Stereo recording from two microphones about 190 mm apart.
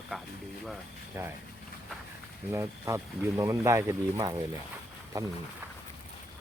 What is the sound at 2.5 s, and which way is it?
Speech, 15° right (ahead or behind).